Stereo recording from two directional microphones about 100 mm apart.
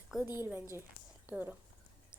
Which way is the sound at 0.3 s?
20° right (ahead or behind).